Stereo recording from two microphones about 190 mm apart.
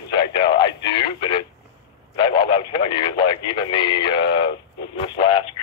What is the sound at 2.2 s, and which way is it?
Radio, 25° left (ahead or behind).